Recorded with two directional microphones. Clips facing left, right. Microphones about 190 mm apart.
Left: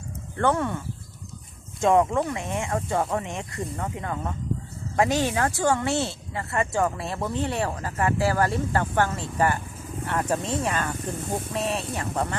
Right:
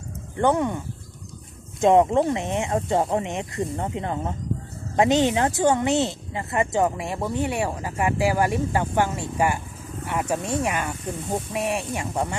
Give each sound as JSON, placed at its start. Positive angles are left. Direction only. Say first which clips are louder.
{"t": 0.3, "sound": "speech", "louder": "right 3 dB", "side_deg": -15}
{"t": 1.8, "sound": "speech", "louder": "right 3 dB", "side_deg": -20}